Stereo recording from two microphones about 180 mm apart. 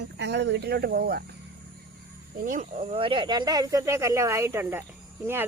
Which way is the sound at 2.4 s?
45° right (ahead or behind).